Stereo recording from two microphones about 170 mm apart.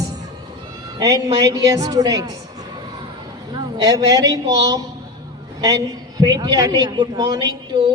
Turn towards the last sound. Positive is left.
turn(degrees=-25)  # may be behind; listen again after turning